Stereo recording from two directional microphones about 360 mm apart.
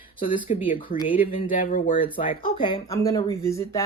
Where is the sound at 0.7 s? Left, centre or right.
Left.